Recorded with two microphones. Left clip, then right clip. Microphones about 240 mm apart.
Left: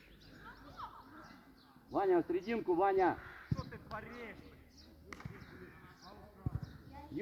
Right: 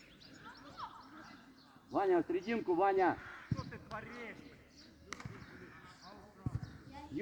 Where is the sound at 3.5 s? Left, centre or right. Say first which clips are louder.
Left 1 dB; left.